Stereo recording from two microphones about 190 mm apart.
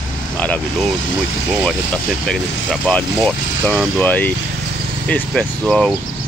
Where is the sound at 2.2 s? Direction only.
5° left (ahead or behind).